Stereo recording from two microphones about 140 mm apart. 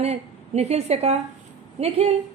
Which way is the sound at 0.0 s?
50° right (ahead or behind).